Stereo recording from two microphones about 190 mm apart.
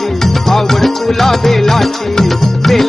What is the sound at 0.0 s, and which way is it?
Music, centre (ahead or behind).